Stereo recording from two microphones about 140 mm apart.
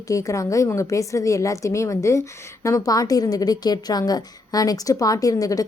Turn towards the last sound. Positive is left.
turn(degrees=25)  # may be behind; listen again after turning